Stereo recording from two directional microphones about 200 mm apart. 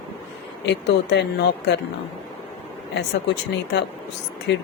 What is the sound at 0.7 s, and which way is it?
Speech, 60° left (ahead or behind).